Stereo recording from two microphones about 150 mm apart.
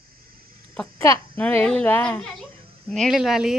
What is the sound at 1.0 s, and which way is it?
A child's voice, 15° left (ahead or behind).